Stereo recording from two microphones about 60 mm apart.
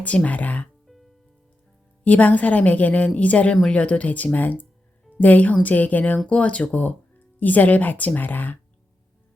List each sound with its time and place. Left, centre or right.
0.0 s speech: left
0.9 s music: centre
2.0 s speech: left